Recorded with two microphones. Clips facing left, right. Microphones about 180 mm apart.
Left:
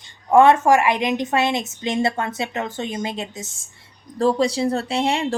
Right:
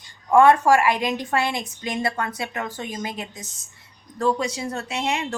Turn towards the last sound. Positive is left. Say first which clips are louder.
# left 5 dB
turn(degrees=30)  # may be behind; listen again after turning